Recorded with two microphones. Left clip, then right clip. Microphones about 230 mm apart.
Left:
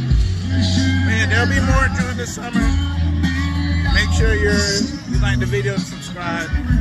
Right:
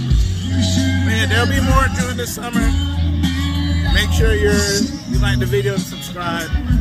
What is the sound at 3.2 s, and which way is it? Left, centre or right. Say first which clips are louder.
Music: right 1 dB; right.